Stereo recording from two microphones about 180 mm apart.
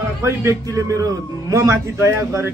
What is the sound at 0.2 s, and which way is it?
A man's voice, 15° right (ahead or behind).